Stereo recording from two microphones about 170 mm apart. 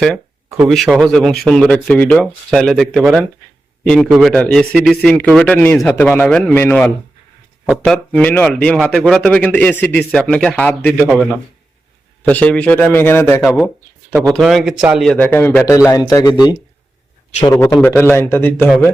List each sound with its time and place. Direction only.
0.0 s a sound: centre (ahead or behind)
0.7 s a man's voice: centre (ahead or behind)
13.4 s a man's voice: centre (ahead or behind); by 16.3 s 20° left (ahead or behind)
17.5 s a man's voice: 15° left (ahead or behind)